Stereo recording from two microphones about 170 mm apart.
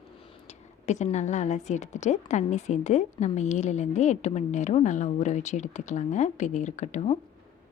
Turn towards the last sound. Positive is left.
turn(degrees=40)  # may be behind; listen again after turning